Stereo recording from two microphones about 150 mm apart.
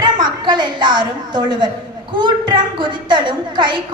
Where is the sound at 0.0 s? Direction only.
30° right (ahead or behind).